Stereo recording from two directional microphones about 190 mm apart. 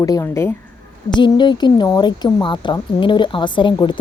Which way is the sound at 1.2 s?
25° left (ahead or behind).